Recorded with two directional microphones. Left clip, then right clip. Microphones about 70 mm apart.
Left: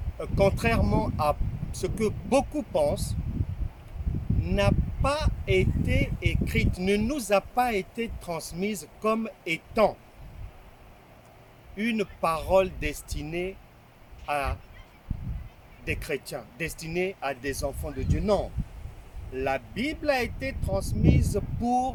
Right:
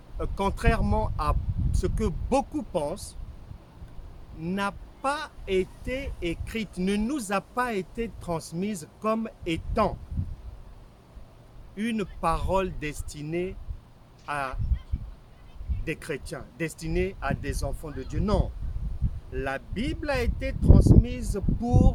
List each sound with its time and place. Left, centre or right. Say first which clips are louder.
0.2 s speech: left 4 dB; right
4.4 s speech: left 4 dB; right
11.8 s speech: left 2 dB; right
15.8 s speech: left 2 dB; right